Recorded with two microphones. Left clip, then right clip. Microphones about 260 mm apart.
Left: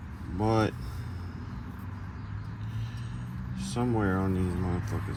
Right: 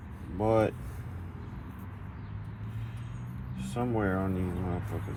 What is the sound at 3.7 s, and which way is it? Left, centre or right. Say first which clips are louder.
Speech: left 1 dB; centre.